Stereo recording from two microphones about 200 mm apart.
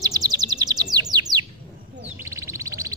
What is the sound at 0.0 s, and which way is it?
Bird, 20° right (ahead or behind).